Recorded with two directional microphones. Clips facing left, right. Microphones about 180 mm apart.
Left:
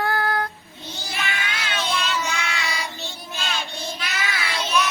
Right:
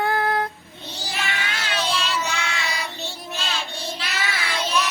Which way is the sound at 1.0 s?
35° right (ahead or behind).